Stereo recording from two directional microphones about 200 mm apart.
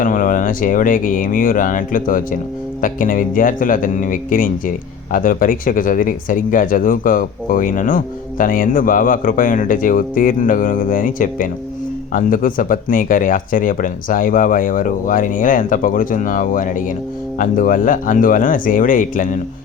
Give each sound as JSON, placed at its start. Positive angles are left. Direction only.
{"t": 0.0, "sound": "speech", "side_deg": 40}